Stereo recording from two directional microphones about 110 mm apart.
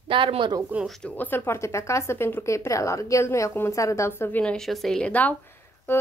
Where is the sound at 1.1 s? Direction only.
15° left (ahead or behind).